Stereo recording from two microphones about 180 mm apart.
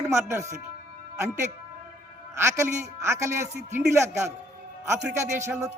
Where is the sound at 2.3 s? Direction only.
15° right (ahead or behind).